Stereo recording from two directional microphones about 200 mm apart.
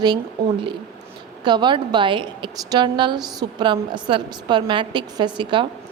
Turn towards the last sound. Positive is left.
turn(degrees=-25)  # may be behind; listen again after turning